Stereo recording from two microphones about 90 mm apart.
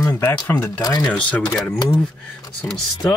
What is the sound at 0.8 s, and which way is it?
Speech, 45° left (ahead or behind).